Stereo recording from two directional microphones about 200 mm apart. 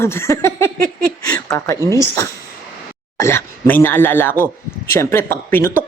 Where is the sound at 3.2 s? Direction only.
10° left (ahead or behind).